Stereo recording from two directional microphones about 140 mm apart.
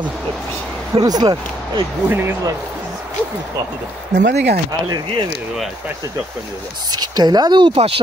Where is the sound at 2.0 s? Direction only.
15° right (ahead or behind).